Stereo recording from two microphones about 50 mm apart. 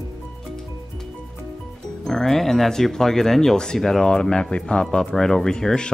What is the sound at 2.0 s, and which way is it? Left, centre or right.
Speech, centre.